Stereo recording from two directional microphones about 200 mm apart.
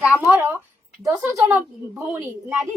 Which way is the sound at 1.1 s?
15° right (ahead or behind).